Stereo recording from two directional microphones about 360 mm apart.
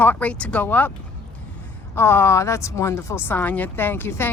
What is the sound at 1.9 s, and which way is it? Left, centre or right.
Speech, centre.